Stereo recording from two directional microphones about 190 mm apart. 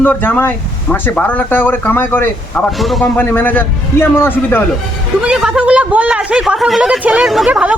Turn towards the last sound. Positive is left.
turn(degrees=-5)  # may be behind; listen again after turning